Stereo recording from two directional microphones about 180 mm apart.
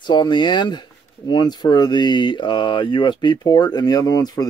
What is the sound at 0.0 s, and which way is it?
Speech, 25° left (ahead or behind).